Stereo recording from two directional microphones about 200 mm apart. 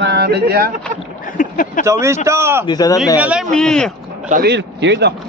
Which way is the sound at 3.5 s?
5° left (ahead or behind).